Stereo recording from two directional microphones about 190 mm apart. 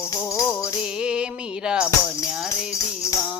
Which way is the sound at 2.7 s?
15° left (ahead or behind).